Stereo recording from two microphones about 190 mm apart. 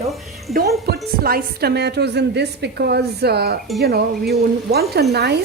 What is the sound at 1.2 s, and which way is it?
A woman's voice, 55° right (ahead or behind).